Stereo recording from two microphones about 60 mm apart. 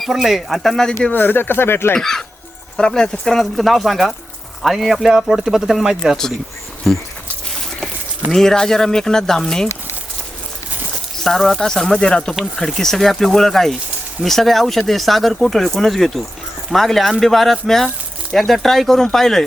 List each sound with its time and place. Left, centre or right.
0.0 s speech: centre
1.1 s speech: left
2.0 s speech: centre
8.3 s speech: centre
11.2 s speech: centre